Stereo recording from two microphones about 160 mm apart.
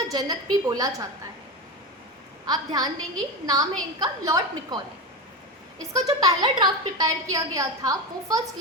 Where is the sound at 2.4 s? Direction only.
25° right (ahead or behind).